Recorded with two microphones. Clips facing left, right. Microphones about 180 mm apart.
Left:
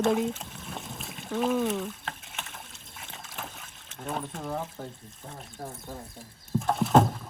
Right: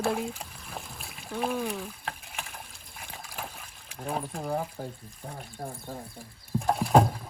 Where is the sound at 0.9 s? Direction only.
Centre (ahead or behind).